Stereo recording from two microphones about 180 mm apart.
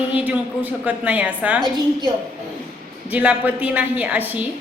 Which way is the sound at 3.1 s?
10° right (ahead or behind).